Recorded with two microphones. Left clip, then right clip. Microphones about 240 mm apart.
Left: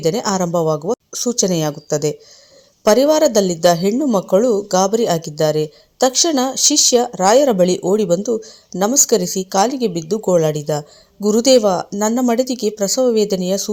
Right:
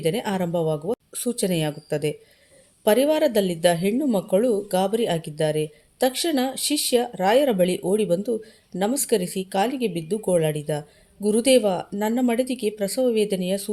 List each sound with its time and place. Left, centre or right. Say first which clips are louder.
0.0 s a woman's voice: left 7 dB; centre